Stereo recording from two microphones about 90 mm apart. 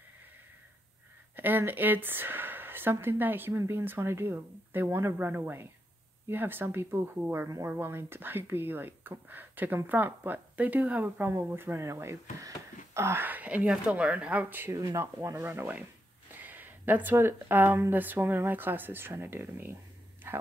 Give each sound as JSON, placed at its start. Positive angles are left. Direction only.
{"t": 1.3, "sound": "speech", "side_deg": -20}
{"t": 7.4, "sound": "speech", "side_deg": -40}
{"t": 7.7, "sound": "speech", "side_deg": -25}
{"t": 14.7, "sound": "speech", "side_deg": -40}
{"t": 20.2, "sound": "a sound", "side_deg": -25}